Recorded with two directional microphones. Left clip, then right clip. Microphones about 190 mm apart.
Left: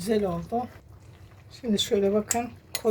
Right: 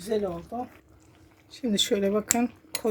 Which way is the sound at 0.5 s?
10° right (ahead or behind).